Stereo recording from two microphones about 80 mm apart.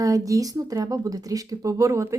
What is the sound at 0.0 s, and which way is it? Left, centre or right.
Speech, right.